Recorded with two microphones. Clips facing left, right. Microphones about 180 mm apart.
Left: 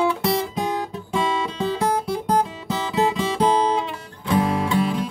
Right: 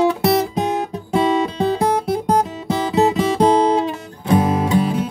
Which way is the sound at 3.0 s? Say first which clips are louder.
Right 5 dB; 40° right (ahead or behind).